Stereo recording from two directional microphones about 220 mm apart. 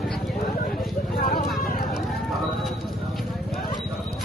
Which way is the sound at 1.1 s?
45° left (ahead or behind).